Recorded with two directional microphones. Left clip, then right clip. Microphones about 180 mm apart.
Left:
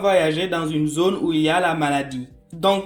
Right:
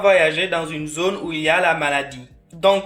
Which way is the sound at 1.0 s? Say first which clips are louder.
Right 1 dB; 35° left (ahead or behind).